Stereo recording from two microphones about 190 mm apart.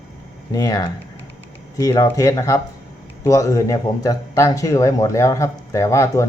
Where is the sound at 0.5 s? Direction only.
20° left (ahead or behind).